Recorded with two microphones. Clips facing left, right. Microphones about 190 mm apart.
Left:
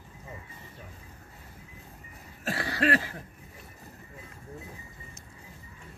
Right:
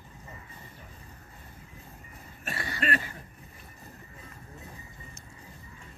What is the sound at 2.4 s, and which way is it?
Cough, 75° left (ahead or behind).